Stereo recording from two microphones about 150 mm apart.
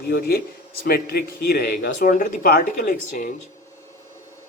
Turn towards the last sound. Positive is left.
turn(degrees=75)  # may be behind; listen again after turning